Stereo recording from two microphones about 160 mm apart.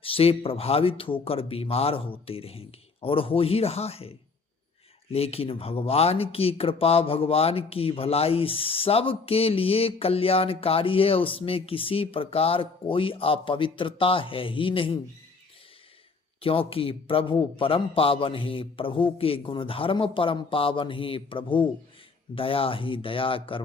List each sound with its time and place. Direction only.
0.0 s speech: 35° left (ahead or behind)
5.1 s speech: 40° left (ahead or behind)
16.4 s speech: 35° left (ahead or behind)